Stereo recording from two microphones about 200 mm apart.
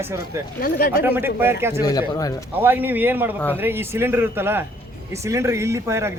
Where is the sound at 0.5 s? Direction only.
45° left (ahead or behind).